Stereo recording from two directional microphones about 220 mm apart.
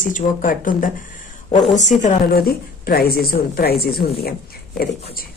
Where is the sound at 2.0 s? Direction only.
45° left (ahead or behind).